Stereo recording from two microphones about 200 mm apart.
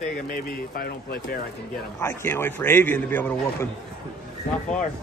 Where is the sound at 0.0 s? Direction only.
40° left (ahead or behind).